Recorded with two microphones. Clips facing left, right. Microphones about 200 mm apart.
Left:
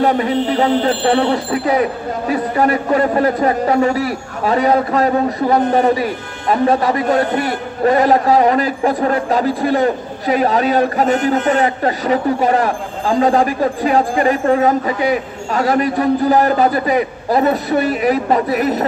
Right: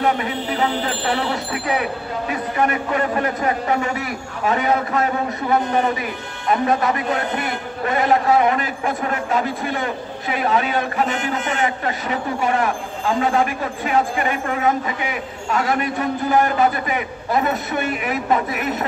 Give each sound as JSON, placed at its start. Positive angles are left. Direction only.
{"t": 0.0, "sound": "speech", "side_deg": 35}